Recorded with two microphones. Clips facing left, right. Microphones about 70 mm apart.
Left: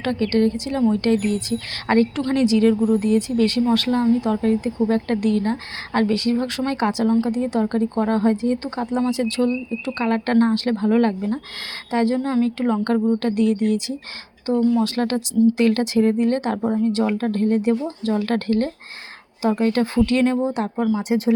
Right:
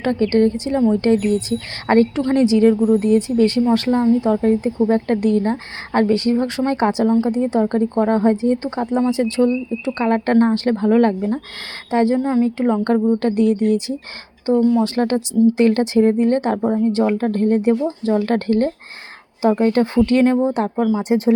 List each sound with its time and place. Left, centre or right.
0.0 s speech: right
20.7 s speech: centre
21.1 s speech: right